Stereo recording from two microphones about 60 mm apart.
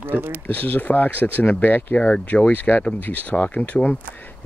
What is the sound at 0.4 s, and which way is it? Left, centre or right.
Speech, left.